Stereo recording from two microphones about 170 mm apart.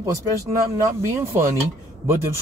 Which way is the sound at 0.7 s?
15° right (ahead or behind).